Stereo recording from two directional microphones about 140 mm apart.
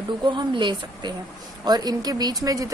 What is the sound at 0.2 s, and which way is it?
A woman's voice, 35° right (ahead or behind).